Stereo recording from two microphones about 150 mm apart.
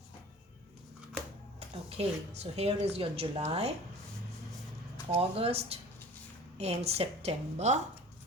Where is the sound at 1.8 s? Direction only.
45° right (ahead or behind).